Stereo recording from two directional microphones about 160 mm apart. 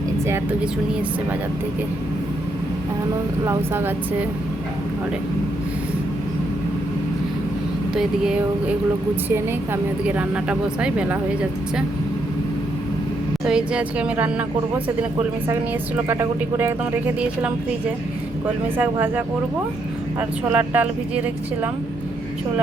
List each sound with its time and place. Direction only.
3.4 s speech: 15° right (ahead or behind)
10.2 s speech: 10° right (ahead or behind)
13.4 s speech: 5° right (ahead or behind)
16.0 s speech: 15° right (ahead or behind)
18.8 s speech: 10° right (ahead or behind)
20.5 s speech: 10° right (ahead or behind)